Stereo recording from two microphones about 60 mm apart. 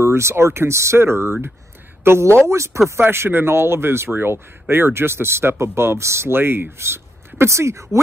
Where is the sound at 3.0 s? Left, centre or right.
Right.